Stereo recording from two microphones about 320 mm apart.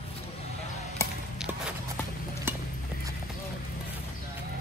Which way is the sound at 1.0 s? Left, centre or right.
Centre.